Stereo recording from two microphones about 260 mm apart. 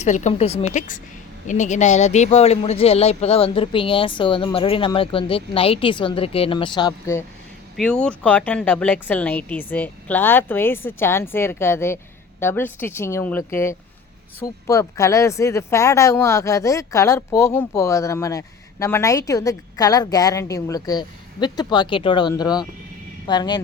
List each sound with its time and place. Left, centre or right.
0.0 s speech: left